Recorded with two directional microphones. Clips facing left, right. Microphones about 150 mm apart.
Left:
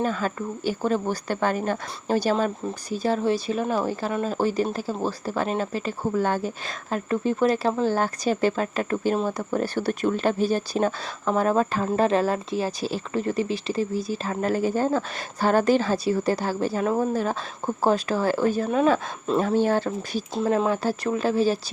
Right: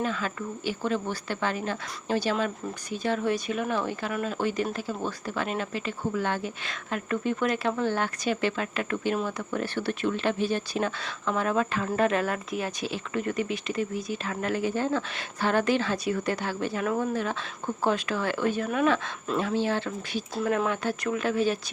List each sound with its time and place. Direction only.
0.0 s speech: 40° left (ahead or behind)
19.4 s speech: 45° left (ahead or behind)
20.3 s speech: 25° left (ahead or behind)